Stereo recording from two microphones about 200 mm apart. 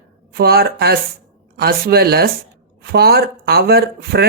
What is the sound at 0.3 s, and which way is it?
Speech, 50° right (ahead or behind).